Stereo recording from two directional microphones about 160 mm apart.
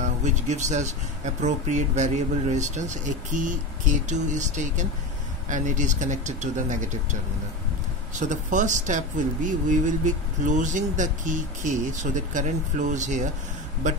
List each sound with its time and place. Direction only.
0.0 s speech: 50° right (ahead or behind)